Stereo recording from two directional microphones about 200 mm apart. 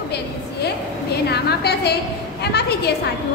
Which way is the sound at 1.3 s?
55° left (ahead or behind).